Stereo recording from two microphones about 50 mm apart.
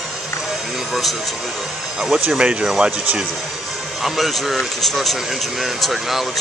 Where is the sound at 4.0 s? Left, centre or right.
Centre.